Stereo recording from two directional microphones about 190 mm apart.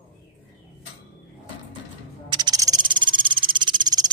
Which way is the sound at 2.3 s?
20° right (ahead or behind).